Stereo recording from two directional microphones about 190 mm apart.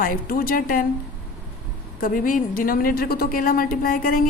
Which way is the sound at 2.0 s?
45° left (ahead or behind).